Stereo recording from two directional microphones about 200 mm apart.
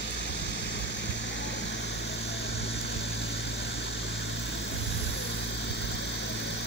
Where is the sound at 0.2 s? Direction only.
60° left (ahead or behind).